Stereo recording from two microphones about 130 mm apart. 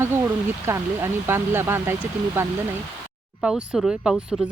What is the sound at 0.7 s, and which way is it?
Speech, 20° right (ahead or behind).